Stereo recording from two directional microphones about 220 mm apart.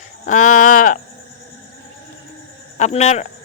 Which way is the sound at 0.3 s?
35° left (ahead or behind).